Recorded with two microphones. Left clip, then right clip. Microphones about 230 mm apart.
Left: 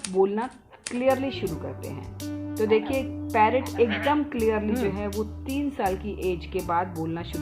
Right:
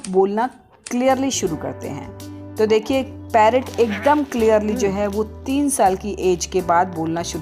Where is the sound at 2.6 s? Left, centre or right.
Right.